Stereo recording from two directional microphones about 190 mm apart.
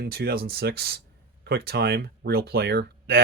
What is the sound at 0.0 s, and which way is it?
Speech, 55° right (ahead or behind).